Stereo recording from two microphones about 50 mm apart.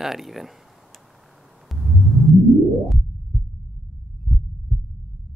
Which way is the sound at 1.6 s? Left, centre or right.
Centre.